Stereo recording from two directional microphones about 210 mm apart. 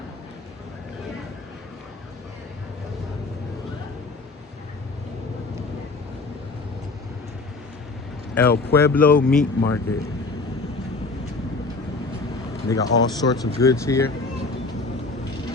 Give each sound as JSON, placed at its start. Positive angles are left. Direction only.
{"t": 8.4, "sound": "speech", "side_deg": 10}
{"t": 12.6, "sound": "speech", "side_deg": 15}